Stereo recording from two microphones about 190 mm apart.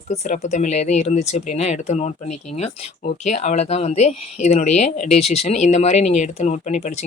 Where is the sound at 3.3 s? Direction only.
35° left (ahead or behind).